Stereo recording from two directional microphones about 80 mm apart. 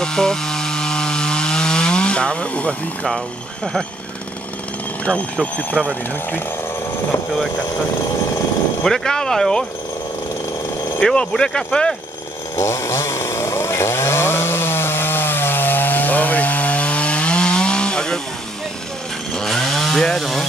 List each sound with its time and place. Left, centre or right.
0.0 s chainsaw: centre
5.0 s speech: centre
8.8 s speech: centre
11.0 s speech: centre
12.5 s chainsaw: left; by 18.2 s centre
19.3 s chainsaw: centre